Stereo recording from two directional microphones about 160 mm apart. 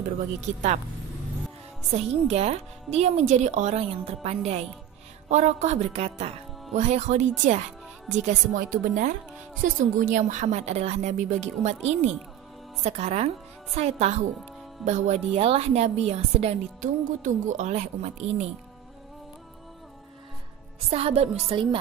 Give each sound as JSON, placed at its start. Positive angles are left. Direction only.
{"t": 2.2, "sound": "a woman's voice", "side_deg": -40}
{"t": 20.9, "sound": "speech", "side_deg": -40}